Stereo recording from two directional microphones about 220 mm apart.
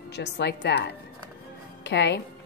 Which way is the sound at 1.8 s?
50° left (ahead or behind).